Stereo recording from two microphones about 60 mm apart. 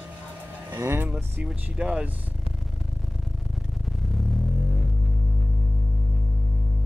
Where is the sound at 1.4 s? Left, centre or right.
Centre.